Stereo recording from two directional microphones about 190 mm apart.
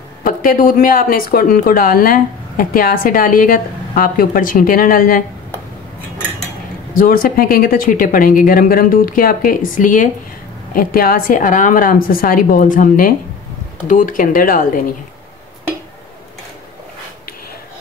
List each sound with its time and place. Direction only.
0.2 s speech: 50° left (ahead or behind)
6.9 s speech: 50° left (ahead or behind)